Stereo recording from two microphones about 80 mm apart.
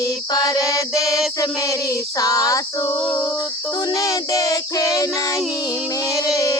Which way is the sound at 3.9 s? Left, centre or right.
Left.